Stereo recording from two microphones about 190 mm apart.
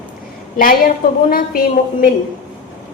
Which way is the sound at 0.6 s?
50° left (ahead or behind).